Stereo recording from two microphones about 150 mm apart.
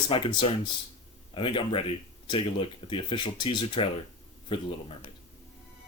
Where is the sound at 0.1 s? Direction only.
35° left (ahead or behind).